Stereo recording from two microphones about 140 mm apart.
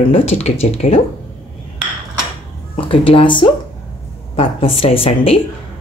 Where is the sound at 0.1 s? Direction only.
45° left (ahead or behind).